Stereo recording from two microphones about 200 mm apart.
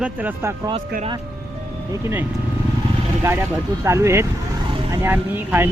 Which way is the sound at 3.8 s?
15° right (ahead or behind).